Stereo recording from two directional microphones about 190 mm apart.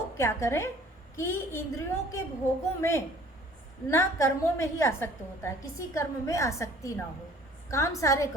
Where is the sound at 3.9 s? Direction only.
15° left (ahead or behind).